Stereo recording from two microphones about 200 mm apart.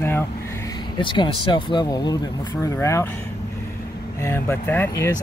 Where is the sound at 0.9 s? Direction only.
25° left (ahead or behind).